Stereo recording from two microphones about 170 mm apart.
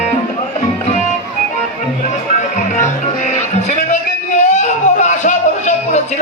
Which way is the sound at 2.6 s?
45° left (ahead or behind).